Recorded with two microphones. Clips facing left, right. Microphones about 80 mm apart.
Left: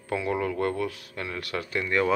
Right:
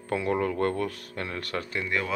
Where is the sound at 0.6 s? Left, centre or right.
Centre.